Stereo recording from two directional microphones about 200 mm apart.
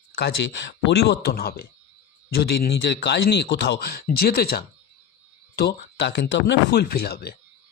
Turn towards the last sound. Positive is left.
turn(degrees=50)  # may be behind; listen again after turning